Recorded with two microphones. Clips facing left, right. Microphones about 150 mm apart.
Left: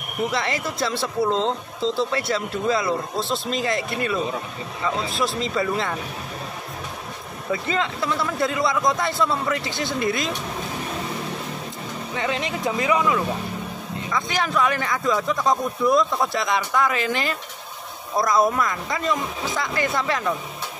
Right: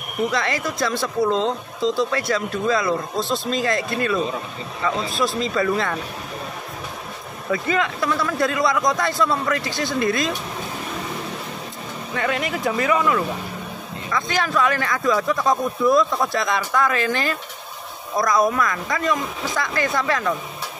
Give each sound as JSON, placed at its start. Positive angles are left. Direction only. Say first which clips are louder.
{"t": 0.3, "sound": "a man's voice", "louder": "right 2 dB", "side_deg": 25}
{"t": 2.0, "sound": "a man's voice", "louder": "right 2 dB", "side_deg": 25}
{"t": 7.5, "sound": "a man's voice", "louder": "right 3 dB", "side_deg": 25}
{"t": 12.2, "sound": "a man's voice", "louder": "right 2 dB", "side_deg": 25}